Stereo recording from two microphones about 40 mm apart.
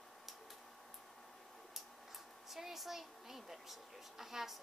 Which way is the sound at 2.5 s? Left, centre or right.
Centre.